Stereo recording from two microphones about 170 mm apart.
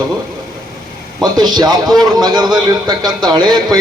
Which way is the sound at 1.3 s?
25° right (ahead or behind).